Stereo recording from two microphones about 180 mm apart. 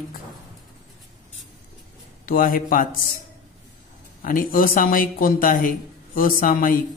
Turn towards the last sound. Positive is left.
turn(degrees=50)  # may be behind; listen again after turning